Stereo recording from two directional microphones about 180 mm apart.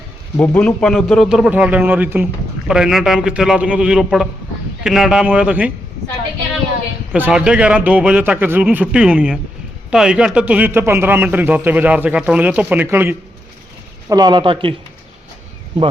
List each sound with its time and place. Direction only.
0.3 s a man's voice: 10° left (ahead or behind); by 5.7 s 5° right (ahead or behind)
7.1 s a man's voice: 5° right (ahead or behind)
14.1 s speech: 20° right (ahead or behind)